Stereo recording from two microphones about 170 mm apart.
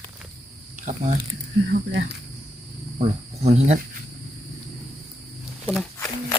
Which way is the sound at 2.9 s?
40° right (ahead or behind).